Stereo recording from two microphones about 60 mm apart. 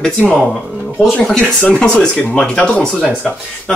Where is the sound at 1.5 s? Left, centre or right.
Centre.